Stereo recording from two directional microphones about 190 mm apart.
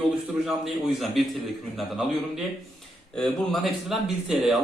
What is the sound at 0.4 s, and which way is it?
A man's voice, centre (ahead or behind).